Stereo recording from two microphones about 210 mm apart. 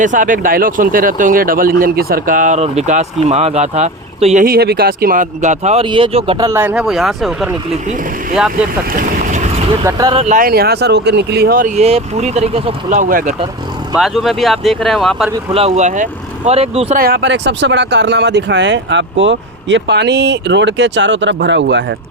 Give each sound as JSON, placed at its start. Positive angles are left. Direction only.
{"t": 0.0, "sound": "speech", "side_deg": -40}
{"t": 4.4, "sound": "speech", "side_deg": -50}
{"t": 8.9, "sound": "boat", "side_deg": -40}
{"t": 9.8, "sound": "speech", "side_deg": -20}
{"t": 10.2, "sound": "speech", "side_deg": -35}
{"t": 13.9, "sound": "speech", "side_deg": 0}
{"t": 15.4, "sound": "speech", "side_deg": -30}
{"t": 17.0, "sound": "speech", "side_deg": -50}